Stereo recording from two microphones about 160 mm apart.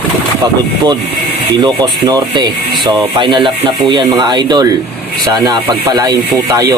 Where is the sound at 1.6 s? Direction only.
25° right (ahead or behind).